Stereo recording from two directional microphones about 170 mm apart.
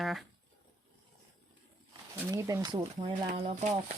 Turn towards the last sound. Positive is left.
turn(degrees=-45)  # may be behind; listen again after turning